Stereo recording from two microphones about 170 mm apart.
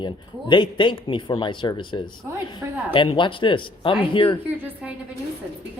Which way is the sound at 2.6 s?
15° right (ahead or behind).